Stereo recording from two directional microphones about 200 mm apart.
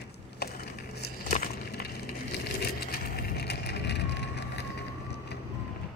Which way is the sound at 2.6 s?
50° left (ahead or behind).